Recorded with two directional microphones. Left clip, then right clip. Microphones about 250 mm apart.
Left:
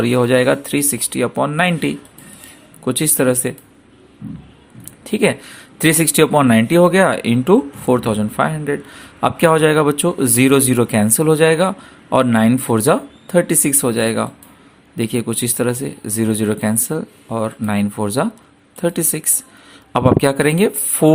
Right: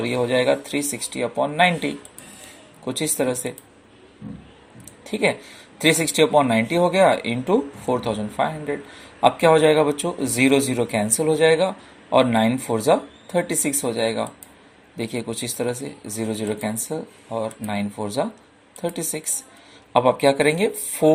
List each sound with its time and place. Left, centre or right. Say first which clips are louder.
0.0 s speech: left 6 dB; left
5.0 s speech: left 5 dB; left